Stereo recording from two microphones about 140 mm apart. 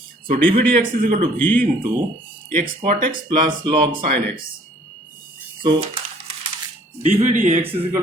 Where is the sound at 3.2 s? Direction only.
35° right (ahead or behind).